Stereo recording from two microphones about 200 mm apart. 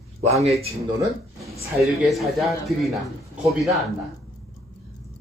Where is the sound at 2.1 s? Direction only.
Centre (ahead or behind).